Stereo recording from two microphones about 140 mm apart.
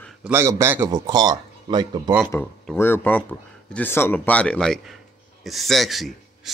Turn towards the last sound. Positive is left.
turn(degrees=0)  # may be behind; listen again after turning